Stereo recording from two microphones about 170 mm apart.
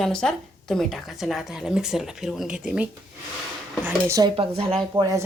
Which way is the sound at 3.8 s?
20° right (ahead or behind).